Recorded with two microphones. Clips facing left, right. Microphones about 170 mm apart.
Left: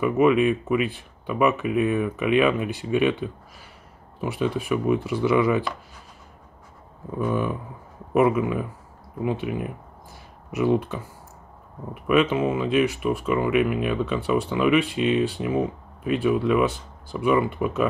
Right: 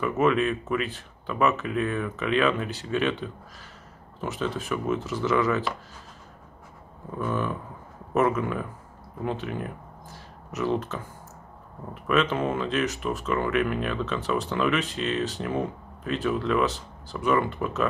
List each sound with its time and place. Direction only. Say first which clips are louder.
0.0 s speech: left 4 dB; 15° left (ahead or behind)
7.2 s speech: left 4 dB; 15° left (ahead or behind)